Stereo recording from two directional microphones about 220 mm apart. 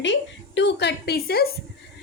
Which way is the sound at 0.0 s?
55° left (ahead or behind).